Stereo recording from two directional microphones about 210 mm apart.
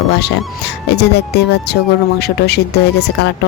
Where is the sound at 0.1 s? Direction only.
55° left (ahead or behind).